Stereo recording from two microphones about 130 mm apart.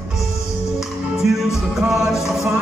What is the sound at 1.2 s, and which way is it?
Music, centre (ahead or behind).